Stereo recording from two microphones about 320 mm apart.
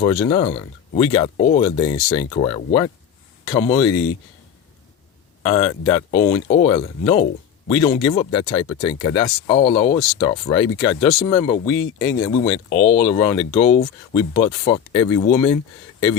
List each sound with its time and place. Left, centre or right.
0.3 s speech: centre
5.4 s speech: centre